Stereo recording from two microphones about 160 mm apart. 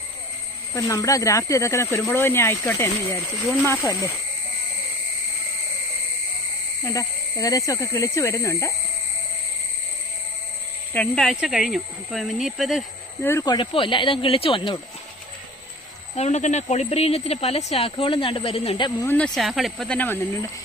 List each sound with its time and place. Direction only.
0.7 s speech: 20° left (ahead or behind)
6.8 s speech: 20° left (ahead or behind)
10.9 s speech: 5° left (ahead or behind)
13.4 s speech: 30° left (ahead or behind)
16.1 s speech: 45° left (ahead or behind)
18.9 s speech: 20° left (ahead or behind)
19.1 s speech: 5° left (ahead or behind)